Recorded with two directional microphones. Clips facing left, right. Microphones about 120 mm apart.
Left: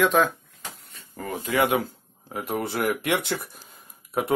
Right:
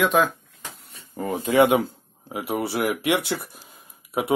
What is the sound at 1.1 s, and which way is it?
Speech, 20° right (ahead or behind).